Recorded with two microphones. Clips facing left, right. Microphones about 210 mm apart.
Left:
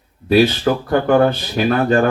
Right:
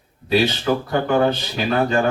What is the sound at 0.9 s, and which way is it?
A man's voice, 50° left (ahead or behind).